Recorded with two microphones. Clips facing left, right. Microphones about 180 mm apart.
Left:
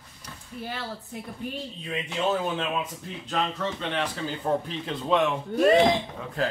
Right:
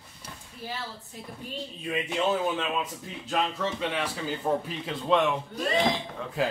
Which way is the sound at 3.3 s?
10° right (ahead or behind).